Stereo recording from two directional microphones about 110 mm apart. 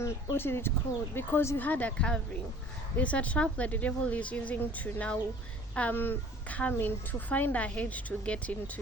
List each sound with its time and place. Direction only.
0.0 s a woman's voice: 25° left (ahead or behind)